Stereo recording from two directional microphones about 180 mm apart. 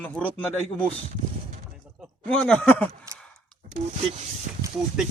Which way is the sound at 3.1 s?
15° right (ahead or behind).